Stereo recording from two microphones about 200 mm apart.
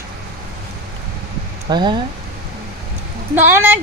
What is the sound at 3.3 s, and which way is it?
Speech, 10° right (ahead or behind).